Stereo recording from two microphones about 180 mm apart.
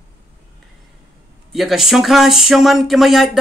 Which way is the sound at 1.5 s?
Centre (ahead or behind).